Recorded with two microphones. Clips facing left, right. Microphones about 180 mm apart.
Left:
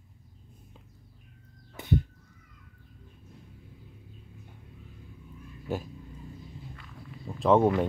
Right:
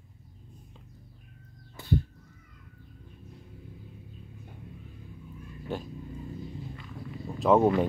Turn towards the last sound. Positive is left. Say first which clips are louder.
# even
turn(degrees=-5)  # may be behind; listen again after turning